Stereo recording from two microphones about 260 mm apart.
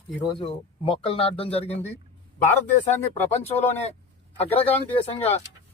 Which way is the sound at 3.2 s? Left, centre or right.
Centre.